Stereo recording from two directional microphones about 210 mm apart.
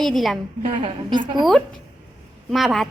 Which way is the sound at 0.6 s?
20° right (ahead or behind).